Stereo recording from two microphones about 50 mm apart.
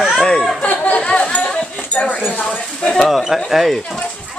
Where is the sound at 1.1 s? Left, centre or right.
Centre.